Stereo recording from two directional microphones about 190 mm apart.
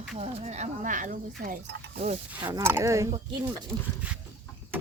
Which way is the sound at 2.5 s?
15° right (ahead or behind).